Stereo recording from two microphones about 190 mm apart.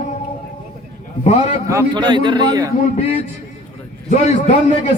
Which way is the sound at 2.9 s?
35° left (ahead or behind).